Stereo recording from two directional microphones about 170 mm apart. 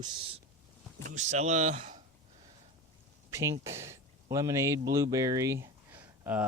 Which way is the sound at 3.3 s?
20° right (ahead or behind).